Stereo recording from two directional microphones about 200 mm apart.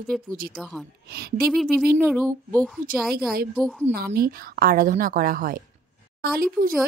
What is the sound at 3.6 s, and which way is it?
Speech, 5° left (ahead or behind).